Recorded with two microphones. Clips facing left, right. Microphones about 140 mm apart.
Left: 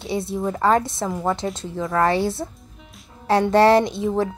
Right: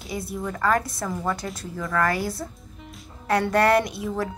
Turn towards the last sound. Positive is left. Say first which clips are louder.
# left 5 dB
turn(degrees=25)  # may be behind; listen again after turning